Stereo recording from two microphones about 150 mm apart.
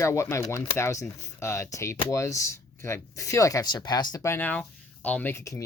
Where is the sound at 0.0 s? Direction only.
20° left (ahead or behind).